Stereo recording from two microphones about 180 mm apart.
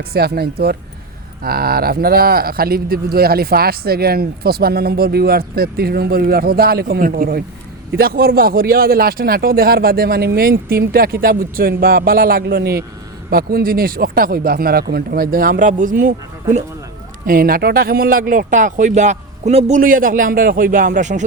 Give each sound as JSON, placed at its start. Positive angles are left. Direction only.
{"t": 0.1, "sound": "speech", "side_deg": -60}
{"t": 19.8, "sound": "speech", "side_deg": -50}